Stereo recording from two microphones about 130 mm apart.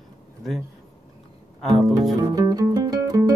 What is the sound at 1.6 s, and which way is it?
Music, centre (ahead or behind).